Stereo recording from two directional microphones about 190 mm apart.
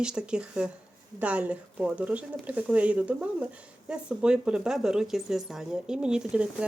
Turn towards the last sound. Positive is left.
turn(degrees=-5)  # may be behind; listen again after turning